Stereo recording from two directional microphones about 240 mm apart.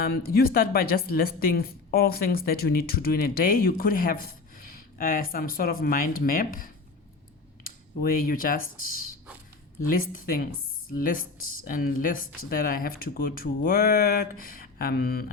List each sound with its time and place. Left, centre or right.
0.0 s speech: left
9.9 s speech: left